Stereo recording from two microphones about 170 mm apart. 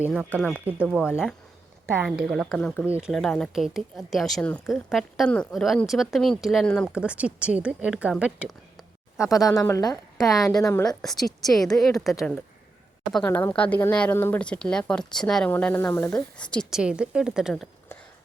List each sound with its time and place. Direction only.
0.0 s a woman's voice: 5° right (ahead or behind)
6.9 s a woman's voice: 5° right (ahead or behind)
9.5 s a woman's voice: 15° left (ahead or behind)
10.2 s speech: centre (ahead or behind)
10.5 s a woman's voice: 20° left (ahead or behind)
10.8 s speech: centre (ahead or behind)